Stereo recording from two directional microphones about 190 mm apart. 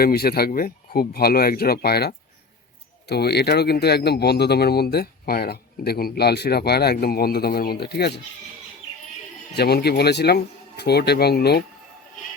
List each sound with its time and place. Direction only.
0.0 s speech: 55° left (ahead or behind)
9.6 s speech: 55° left (ahead or behind)